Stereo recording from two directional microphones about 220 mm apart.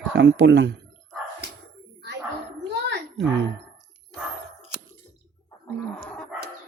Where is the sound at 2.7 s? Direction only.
55° right (ahead or behind).